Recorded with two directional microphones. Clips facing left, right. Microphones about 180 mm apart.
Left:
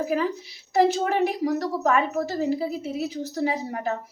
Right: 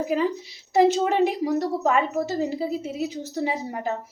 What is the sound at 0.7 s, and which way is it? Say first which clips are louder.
A woman's voice: right 2 dB; 20° right (ahead or behind).